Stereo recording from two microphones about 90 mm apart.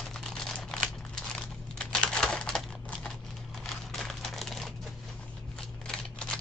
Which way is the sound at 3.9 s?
Centre (ahead or behind).